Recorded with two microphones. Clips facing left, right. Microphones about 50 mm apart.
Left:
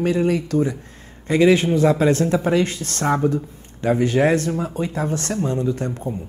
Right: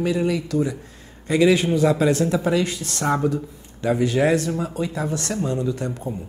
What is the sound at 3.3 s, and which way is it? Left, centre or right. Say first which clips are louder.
Speech: left 2 dB; left.